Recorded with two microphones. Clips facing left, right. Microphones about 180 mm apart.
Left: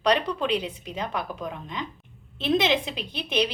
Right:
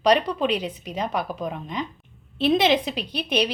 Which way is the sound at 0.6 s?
25° right (ahead or behind).